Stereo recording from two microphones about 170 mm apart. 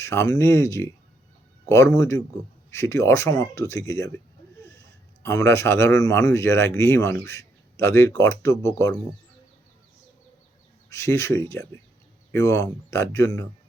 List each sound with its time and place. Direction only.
0.0 s speech: 15° left (ahead or behind)
2.0 s speech: 15° left (ahead or behind)
5.2 s speech: 15° left (ahead or behind)
10.8 s speech: 15° left (ahead or behind)